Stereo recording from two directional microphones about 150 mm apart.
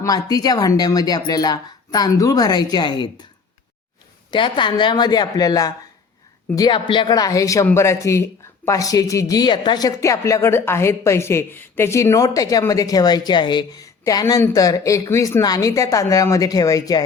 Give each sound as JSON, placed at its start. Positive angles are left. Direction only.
{"t": 0.0, "sound": "speech", "side_deg": 25}
{"t": 4.3, "sound": "speech", "side_deg": 30}